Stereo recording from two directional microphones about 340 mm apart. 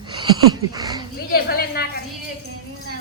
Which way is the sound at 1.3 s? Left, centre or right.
Left.